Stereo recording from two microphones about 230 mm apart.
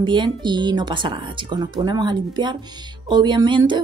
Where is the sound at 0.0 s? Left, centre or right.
Centre.